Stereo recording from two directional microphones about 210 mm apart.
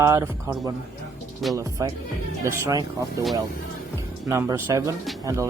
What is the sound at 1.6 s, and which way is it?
Speech, 15° right (ahead or behind).